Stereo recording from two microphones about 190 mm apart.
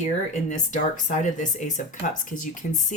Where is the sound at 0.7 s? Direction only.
40° left (ahead or behind).